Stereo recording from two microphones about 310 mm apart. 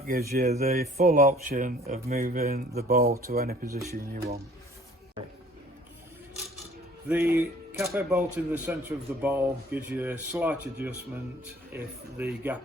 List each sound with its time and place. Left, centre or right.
0.0 s speech: right
7.1 s speech: centre
11.8 s speech: centre